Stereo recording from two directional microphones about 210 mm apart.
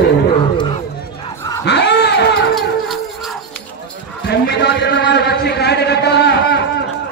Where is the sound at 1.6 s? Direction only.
55° left (ahead or behind).